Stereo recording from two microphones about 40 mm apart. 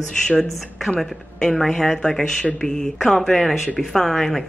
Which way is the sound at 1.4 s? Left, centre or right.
Centre.